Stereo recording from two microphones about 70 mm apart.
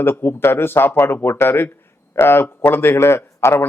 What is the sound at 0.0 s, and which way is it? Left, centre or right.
A man's voice, left.